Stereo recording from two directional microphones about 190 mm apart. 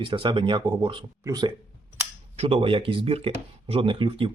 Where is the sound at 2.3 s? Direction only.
30° right (ahead or behind).